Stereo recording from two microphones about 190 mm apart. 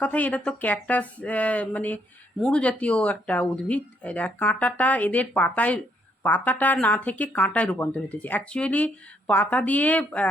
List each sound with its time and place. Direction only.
0.0 s speech: 10° left (ahead or behind)